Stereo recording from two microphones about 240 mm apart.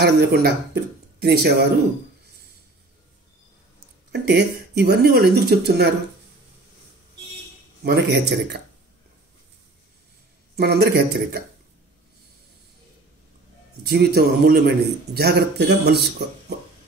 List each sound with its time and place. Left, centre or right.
0.0 s a man's voice: right
4.1 s speech: right
7.8 s speech: right
10.5 s a man's voice: right
13.8 s a man's voice: right